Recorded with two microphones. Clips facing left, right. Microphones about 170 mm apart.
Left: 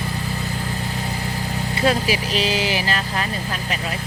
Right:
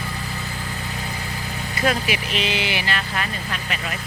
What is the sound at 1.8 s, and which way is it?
Speech, 35° left (ahead or behind).